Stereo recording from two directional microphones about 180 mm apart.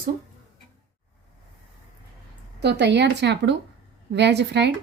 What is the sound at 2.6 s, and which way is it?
A woman's voice, 70° right (ahead or behind).